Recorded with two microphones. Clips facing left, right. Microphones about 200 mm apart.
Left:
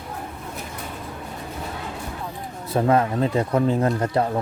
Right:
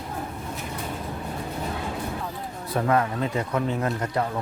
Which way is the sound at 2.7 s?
25° left (ahead or behind).